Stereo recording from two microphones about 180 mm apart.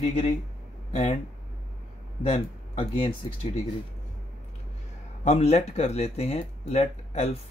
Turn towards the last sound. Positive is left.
turn(degrees=35)  # may be behind; listen again after turning